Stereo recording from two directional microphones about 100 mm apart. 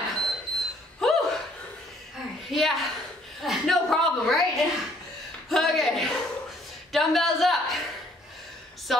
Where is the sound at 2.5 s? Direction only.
Centre (ahead or behind).